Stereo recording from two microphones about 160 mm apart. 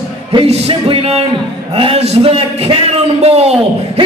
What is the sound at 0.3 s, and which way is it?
A man's voice, 35° right (ahead or behind).